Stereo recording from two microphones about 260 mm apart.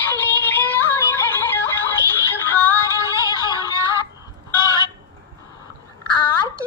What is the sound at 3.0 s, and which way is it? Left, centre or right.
Yodeling, centre.